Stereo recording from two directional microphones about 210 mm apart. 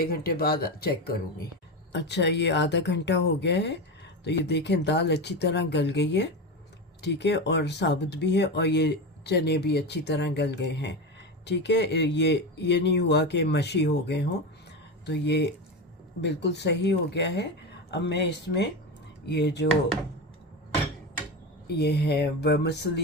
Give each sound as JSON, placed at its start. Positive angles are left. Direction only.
{"t": 0.0, "sound": "speech", "side_deg": 45}
{"t": 21.7, "sound": "speech", "side_deg": 50}